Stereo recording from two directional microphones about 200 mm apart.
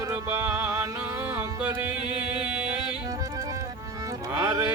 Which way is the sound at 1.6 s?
5° right (ahead or behind).